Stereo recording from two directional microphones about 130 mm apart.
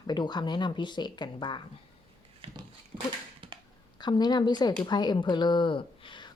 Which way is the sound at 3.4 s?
40° right (ahead or behind).